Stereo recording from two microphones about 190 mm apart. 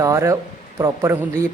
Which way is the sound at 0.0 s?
15° right (ahead or behind).